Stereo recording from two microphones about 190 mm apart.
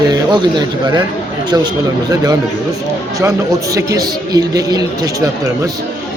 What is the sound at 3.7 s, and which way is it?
Speech, 20° right (ahead or behind).